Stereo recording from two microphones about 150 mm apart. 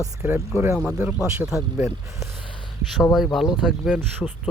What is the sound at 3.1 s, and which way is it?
Speech, centre (ahead or behind).